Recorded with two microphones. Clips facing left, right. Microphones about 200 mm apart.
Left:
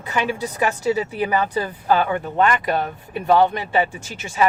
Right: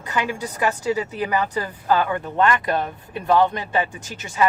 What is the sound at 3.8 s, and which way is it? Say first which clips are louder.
Speech: left 3 dB; 25° left (ahead or behind).